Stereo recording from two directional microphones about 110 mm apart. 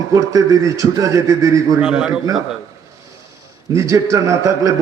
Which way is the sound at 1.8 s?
5° right (ahead or behind).